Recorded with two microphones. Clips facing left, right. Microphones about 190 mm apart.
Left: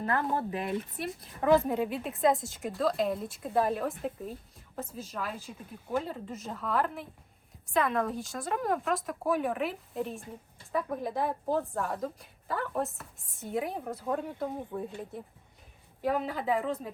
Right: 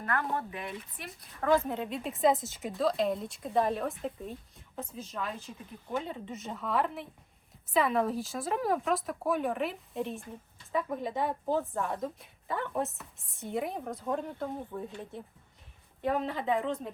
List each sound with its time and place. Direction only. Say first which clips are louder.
0.0 s speech: left 3 dB; 30° left (ahead or behind)
1.6 s a woman's voice: left 4 dB; 10° left (ahead or behind)